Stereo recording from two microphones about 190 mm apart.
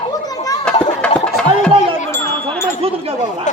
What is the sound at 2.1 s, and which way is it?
Wind chime, 15° left (ahead or behind).